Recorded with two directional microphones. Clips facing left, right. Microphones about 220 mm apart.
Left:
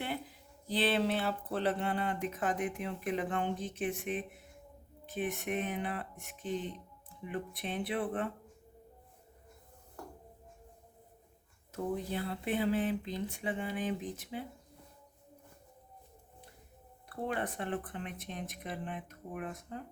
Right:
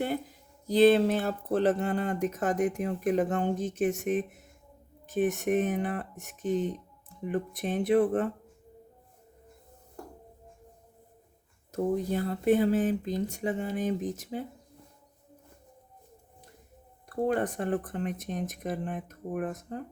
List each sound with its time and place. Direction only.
0.0 s speech: 45° right (ahead or behind)
11.7 s speech: 45° right (ahead or behind)
17.1 s speech: 45° right (ahead or behind)